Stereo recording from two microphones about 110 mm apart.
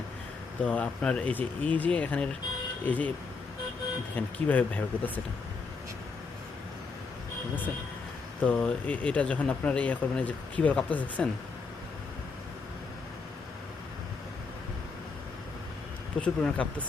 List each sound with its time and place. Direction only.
0.6 s speech: 10° left (ahead or behind)
4.1 s speech: 15° left (ahead or behind)
8.4 s speech: 10° left (ahead or behind)
16.2 s speech: 10° left (ahead or behind)